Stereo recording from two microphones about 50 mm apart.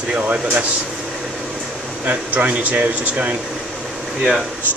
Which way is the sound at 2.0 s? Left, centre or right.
Right.